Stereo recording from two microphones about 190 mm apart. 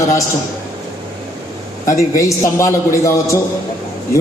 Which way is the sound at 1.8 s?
15° left (ahead or behind).